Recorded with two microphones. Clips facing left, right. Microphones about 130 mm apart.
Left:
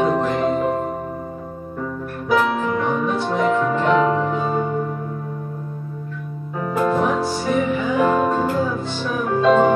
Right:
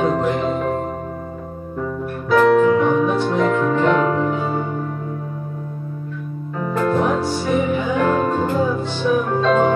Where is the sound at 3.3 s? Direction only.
10° left (ahead or behind).